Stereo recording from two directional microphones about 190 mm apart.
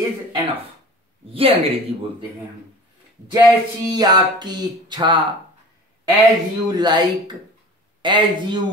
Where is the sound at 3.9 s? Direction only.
20° right (ahead or behind).